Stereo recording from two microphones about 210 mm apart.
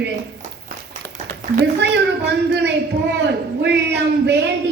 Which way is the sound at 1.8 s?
55° right (ahead or behind).